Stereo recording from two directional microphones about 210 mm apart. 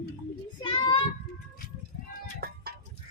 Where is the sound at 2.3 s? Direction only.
45° right (ahead or behind).